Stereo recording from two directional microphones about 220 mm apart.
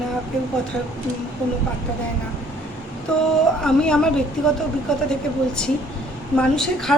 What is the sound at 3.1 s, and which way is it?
A woman's voice, 5° left (ahead or behind).